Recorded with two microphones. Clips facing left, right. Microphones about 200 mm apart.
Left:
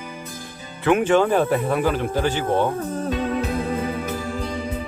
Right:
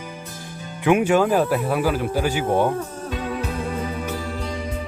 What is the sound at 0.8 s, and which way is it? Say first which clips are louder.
Speech: even; 10° right (ahead or behind).